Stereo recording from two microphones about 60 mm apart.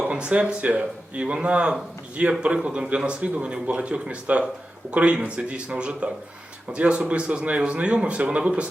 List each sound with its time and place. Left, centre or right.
0.0 s a man's voice: centre